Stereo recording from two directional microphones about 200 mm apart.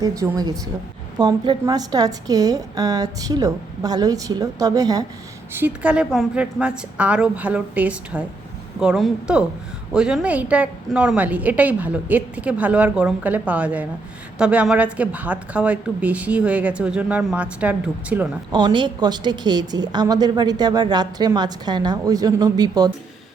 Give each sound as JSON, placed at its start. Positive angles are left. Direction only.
{"t": 0.0, "sound": "a woman's voice", "side_deg": -20}
{"t": 5.5, "sound": "a woman's voice", "side_deg": -5}
{"t": 18.5, "sound": "a woman's voice", "side_deg": -25}